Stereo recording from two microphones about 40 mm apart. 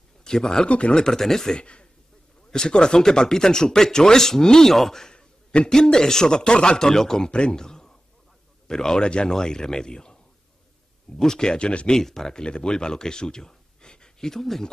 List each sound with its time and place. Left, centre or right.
0.2 s speech: centre
0.7 s speech: left
0.9 s speech: centre
1.6 s a man's voice: left; by 5.1 s centre
5.1 s a sound: left
5.7 s speech: centre
7.2 s speech: left
11.1 s speech: centre
12.0 s speech: centre